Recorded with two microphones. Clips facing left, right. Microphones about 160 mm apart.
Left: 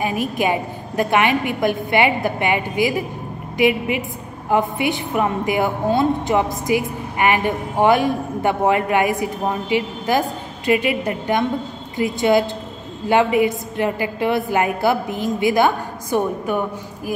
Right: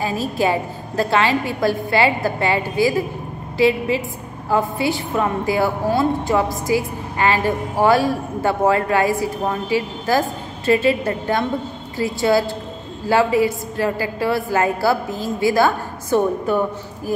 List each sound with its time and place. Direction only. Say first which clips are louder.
0.0 s a woman's voice: even; 15° left (ahead or behind)